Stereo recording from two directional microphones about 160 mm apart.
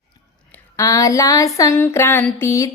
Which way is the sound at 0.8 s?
20° left (ahead or behind).